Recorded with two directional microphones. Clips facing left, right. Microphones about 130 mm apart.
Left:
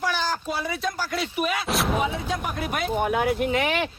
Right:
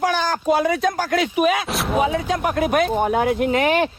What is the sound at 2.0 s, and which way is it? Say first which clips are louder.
Speech: right 7 dB; 60° right (ahead or behind).